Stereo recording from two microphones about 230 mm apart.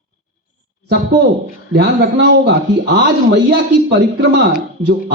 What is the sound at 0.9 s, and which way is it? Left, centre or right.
A man's voice, right.